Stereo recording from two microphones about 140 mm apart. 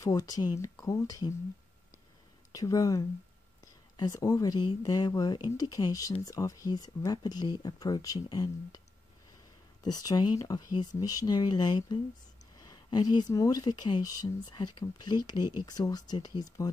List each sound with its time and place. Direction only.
0.0 s speech: 25° left (ahead or behind)
2.5 s speech: 25° left (ahead or behind)
9.8 s speech: 30° left (ahead or behind)